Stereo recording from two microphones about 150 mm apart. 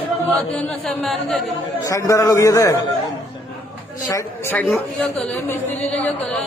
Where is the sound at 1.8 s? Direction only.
20° left (ahead or behind).